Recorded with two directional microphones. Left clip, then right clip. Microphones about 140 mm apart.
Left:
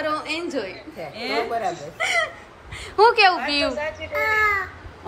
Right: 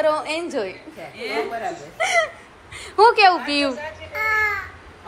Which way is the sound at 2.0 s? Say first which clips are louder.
Right 3 dB; 10° left (ahead or behind).